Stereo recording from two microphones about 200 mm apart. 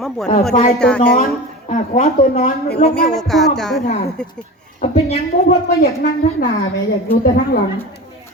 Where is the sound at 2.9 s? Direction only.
5° left (ahead or behind).